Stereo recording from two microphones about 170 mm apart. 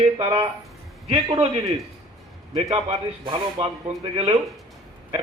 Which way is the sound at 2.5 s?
40° right (ahead or behind).